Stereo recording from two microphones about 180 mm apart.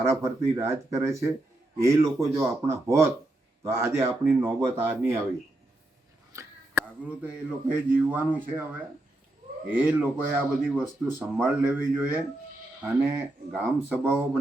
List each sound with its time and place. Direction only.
0.0 s speech: 15° right (ahead or behind)
6.3 s speech: 15° right (ahead or behind)